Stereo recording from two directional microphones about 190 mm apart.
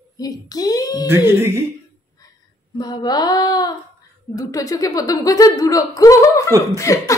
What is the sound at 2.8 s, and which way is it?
Speech, 20° left (ahead or behind).